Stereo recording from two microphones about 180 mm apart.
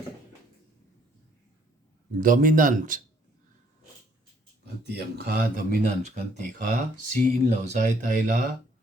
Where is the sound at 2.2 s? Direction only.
50° right (ahead or behind).